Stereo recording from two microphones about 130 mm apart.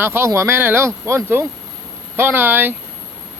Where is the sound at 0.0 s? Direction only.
20° right (ahead or behind).